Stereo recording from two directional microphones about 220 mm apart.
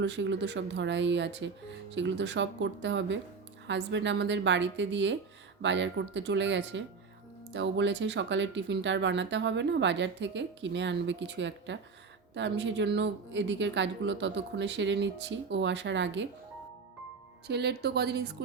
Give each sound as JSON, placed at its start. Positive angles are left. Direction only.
{"t": 0.0, "sound": "speech", "side_deg": -55}
{"t": 17.5, "sound": "speech", "side_deg": -50}